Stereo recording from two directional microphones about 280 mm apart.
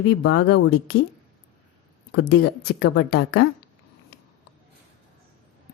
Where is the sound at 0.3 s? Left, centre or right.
Left.